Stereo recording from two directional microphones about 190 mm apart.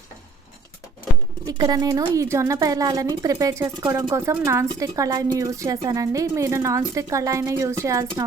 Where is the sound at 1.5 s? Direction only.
20° right (ahead or behind).